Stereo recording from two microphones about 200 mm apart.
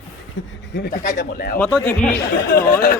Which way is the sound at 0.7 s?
60° left (ahead or behind).